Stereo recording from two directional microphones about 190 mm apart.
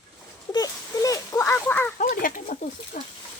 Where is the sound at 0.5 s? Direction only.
20° left (ahead or behind).